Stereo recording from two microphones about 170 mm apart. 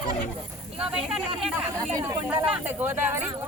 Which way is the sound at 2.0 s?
15° right (ahead or behind).